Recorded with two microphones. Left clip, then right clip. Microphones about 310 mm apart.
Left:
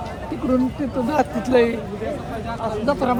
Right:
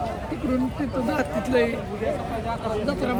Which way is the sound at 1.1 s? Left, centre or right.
Centre.